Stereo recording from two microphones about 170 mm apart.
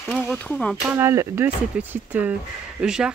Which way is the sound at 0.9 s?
15° right (ahead or behind).